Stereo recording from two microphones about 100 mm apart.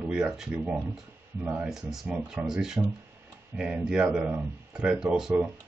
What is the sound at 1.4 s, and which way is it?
Speech, 15° right (ahead or behind).